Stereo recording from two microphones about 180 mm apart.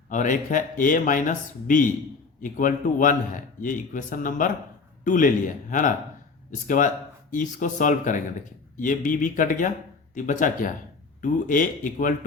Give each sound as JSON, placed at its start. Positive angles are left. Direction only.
{"t": 0.1, "sound": "a man's voice", "side_deg": 45}